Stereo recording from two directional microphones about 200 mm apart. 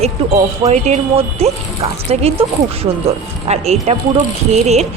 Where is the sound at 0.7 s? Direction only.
30° right (ahead or behind).